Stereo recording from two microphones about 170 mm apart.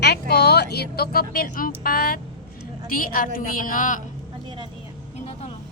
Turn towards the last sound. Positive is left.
turn(degrees=-30)  # may be behind; listen again after turning